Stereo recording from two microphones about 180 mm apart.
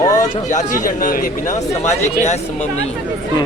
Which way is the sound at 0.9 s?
50° left (ahead or behind).